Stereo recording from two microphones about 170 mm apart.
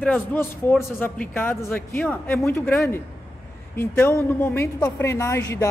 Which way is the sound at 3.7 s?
15° left (ahead or behind).